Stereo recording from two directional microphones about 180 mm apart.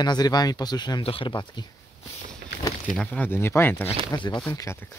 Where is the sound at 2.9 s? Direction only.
5° left (ahead or behind).